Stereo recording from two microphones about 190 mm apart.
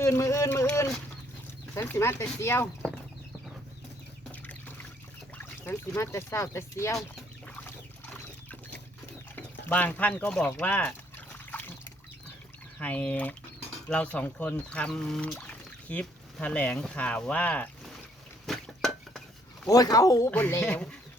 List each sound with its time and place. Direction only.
0.0 s speech: 15° left (ahead or behind)
5.4 s speech: 10° left (ahead or behind)
7.2 s duck: 5° left (ahead or behind)
9.3 s a sound: 10° left (ahead or behind)
12.8 s speech: 5° left (ahead or behind)
18.4 s a sound: centre (ahead or behind)
19.6 s speech: 20° left (ahead or behind)